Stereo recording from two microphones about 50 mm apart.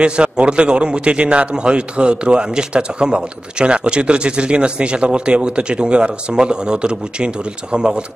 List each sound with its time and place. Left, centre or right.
0.0 s a man's voice: right